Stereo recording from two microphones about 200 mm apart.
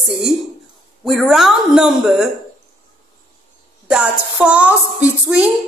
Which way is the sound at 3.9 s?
5° right (ahead or behind).